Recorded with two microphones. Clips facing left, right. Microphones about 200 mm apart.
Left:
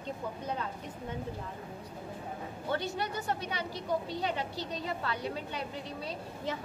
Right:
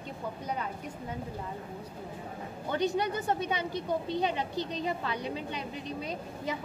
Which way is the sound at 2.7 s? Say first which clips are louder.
Right 5 dB; 15° right (ahead or behind).